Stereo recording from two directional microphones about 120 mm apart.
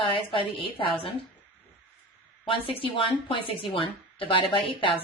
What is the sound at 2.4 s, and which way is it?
A woman's voice, 45° left (ahead or behind).